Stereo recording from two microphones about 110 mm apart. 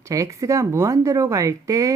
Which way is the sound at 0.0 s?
30° right (ahead or behind).